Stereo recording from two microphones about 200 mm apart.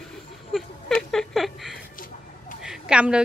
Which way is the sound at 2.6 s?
5° right (ahead or behind).